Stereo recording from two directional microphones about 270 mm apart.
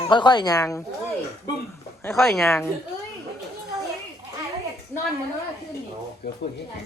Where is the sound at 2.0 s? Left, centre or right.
Centre.